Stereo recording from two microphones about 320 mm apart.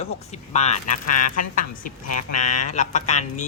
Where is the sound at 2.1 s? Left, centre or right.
Left.